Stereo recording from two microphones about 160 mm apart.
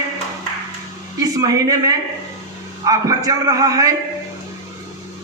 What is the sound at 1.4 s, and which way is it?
A man's voice, 20° right (ahead or behind).